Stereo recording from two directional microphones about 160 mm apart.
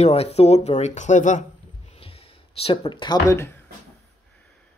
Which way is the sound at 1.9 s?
35° left (ahead or behind).